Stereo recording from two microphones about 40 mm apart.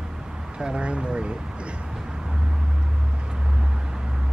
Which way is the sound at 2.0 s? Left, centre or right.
Centre.